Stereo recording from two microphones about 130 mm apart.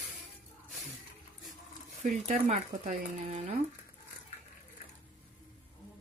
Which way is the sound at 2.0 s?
55° right (ahead or behind).